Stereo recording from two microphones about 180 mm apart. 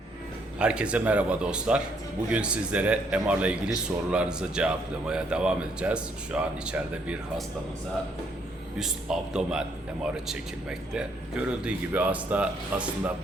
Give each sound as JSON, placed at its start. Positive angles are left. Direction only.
{"t": 0.6, "sound": "a man's voice", "side_deg": -5}
{"t": 8.8, "sound": "a man's voice", "side_deg": -5}